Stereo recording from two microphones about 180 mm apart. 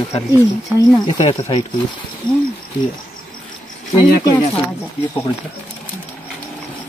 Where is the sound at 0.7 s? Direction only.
25° left (ahead or behind).